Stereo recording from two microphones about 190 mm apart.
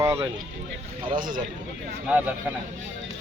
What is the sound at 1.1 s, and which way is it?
Speech, 45° right (ahead or behind).